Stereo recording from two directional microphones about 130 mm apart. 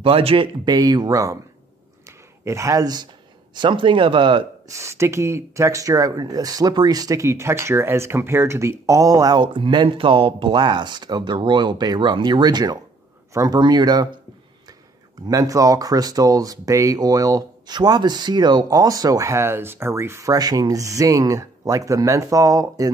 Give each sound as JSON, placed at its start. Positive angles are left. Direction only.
{"t": 0.0, "sound": "speech", "side_deg": -45}
{"t": 0.7, "sound": "speech", "side_deg": -30}
{"t": 2.0, "sound": "a sound", "side_deg": -20}
{"t": 3.5, "sound": "speech", "side_deg": -40}
{"t": 4.6, "sound": "speech", "side_deg": -20}
{"t": 15.2, "sound": "speech", "side_deg": -25}